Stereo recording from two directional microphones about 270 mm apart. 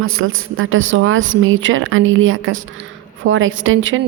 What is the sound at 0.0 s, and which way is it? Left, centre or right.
A woman's voice, right.